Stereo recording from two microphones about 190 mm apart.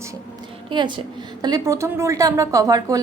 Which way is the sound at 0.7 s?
25° right (ahead or behind).